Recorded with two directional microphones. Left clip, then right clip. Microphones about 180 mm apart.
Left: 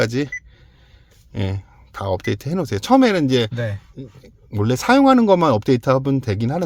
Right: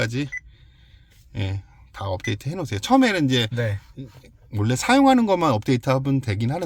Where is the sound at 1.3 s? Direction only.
30° left (ahead or behind).